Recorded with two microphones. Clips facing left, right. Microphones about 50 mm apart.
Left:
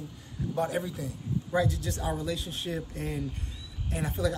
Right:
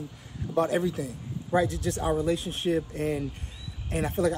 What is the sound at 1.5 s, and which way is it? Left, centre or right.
Speech, right.